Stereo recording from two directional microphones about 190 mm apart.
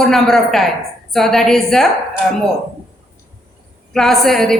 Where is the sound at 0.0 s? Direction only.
Centre (ahead or behind).